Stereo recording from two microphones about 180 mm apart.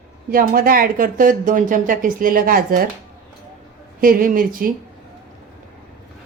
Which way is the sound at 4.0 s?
50° right (ahead or behind).